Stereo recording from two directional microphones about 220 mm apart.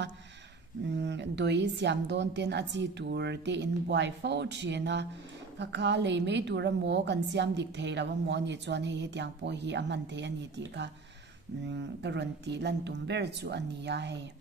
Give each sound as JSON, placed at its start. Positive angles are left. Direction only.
{"t": 1.0, "sound": "a woman's voice", "side_deg": -50}